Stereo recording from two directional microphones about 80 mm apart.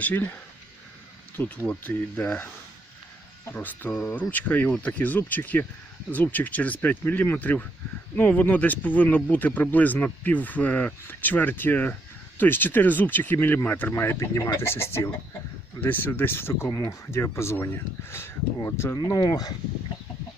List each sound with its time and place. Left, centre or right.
0.0 s speech: left
1.4 s speech: left
3.5 s speech: centre
16.6 s speech: left
17.1 s speech: left
19.0 s speech: left